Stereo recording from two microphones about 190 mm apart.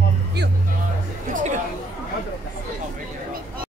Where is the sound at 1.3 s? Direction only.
40° right (ahead or behind).